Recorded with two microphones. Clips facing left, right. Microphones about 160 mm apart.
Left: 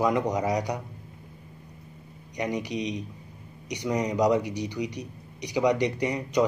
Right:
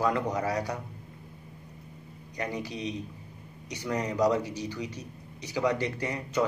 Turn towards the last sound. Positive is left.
turn(degrees=15)  # may be behind; listen again after turning